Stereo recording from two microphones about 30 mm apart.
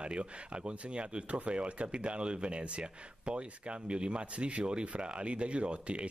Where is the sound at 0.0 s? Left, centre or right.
Right.